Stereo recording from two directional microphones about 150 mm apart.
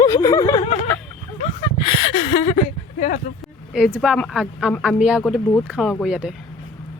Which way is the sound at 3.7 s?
5° right (ahead or behind).